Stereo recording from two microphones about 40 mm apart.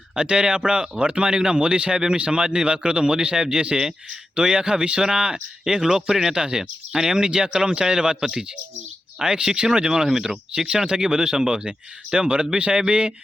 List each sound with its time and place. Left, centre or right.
0.2 s speech: right
4.4 s speech: right